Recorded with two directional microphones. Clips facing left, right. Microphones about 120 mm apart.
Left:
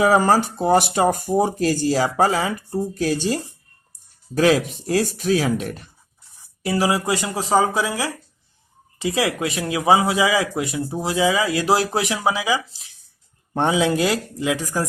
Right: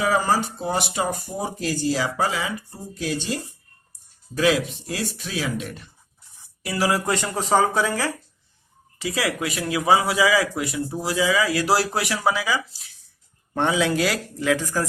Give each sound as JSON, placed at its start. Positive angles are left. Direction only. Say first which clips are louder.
{"t": 0.0, "sound": "speech", "louder": "left 5 dB", "side_deg": 50}
{"t": 6.6, "sound": "speech", "louder": "left 5 dB", "side_deg": 30}
{"t": 6.8, "sound": "speech", "louder": "right 1 dB", "side_deg": 15}
{"t": 9.0, "sound": "speech", "louder": "left 4 dB", "side_deg": 25}